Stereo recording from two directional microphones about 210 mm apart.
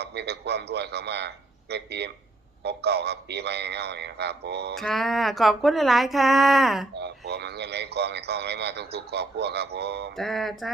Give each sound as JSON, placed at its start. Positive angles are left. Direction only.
{"t": 0.0, "sound": "speech", "side_deg": -50}
{"t": 4.7, "sound": "speech", "side_deg": 0}
{"t": 6.9, "sound": "speech", "side_deg": -50}
{"t": 10.2, "sound": "speech", "side_deg": 0}